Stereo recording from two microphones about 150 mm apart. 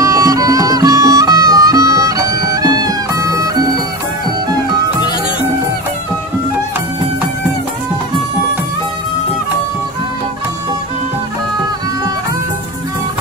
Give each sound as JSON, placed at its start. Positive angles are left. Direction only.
{"t": 0.0, "sound": "music", "side_deg": -20}